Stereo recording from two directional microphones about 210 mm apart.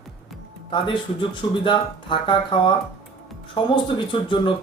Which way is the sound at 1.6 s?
25° left (ahead or behind).